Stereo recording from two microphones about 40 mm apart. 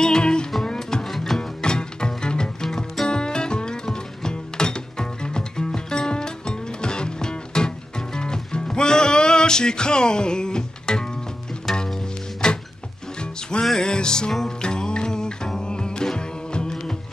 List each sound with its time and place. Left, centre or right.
0.0 s music: centre
1.6 s music: left